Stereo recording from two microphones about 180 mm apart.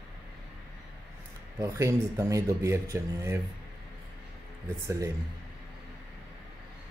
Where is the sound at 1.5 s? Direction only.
15° right (ahead or behind).